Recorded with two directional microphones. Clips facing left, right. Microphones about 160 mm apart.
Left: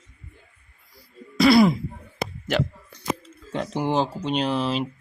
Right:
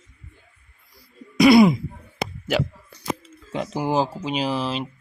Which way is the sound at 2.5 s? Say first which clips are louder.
Right 1 dB; 10° right (ahead or behind).